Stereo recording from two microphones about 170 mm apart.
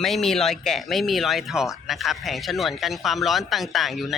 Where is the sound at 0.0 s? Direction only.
Centre (ahead or behind).